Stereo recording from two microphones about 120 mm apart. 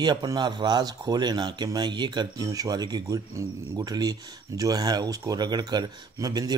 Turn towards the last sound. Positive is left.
turn(degrees=-30)  # may be behind; listen again after turning